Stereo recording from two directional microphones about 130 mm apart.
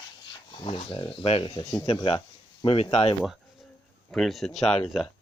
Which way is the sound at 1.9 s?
40° left (ahead or behind).